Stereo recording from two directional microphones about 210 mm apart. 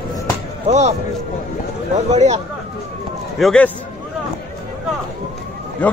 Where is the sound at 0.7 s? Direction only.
30° right (ahead or behind).